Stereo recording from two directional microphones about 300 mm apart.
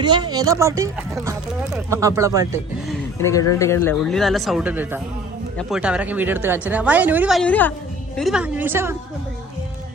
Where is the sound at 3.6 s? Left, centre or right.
Centre.